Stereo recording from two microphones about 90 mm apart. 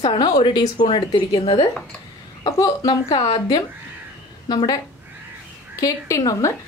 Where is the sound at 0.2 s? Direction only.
55° left (ahead or behind); by 1.7 s 80° left.